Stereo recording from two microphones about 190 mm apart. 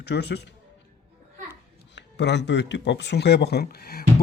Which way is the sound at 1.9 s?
65° left (ahead or behind).